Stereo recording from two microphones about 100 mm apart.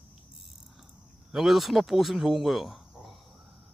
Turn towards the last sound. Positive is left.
turn(degrees=0)  # may be behind; listen again after turning